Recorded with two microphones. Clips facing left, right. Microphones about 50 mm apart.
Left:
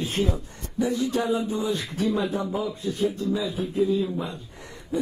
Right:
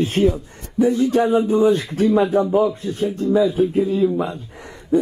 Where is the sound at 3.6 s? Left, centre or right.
Right.